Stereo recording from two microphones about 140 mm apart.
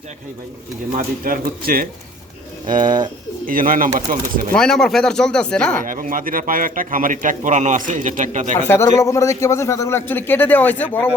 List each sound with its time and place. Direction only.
0.9 s speech: 85° right
2.8 s speech: 30° right (ahead or behind)
3.4 s speech: 80° right
4.5 s speech: 5° left (ahead or behind)
5.8 s a man's voice: 75° right (ahead or behind)
8.5 s a man's voice: 15° left (ahead or behind)